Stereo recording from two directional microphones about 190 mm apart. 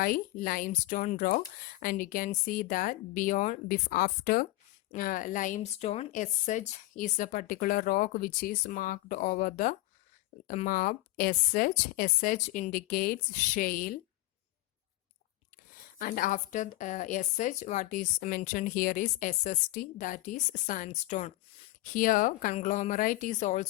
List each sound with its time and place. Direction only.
0.0 s speech: 50° left (ahead or behind)
15.8 s speech: 45° left (ahead or behind)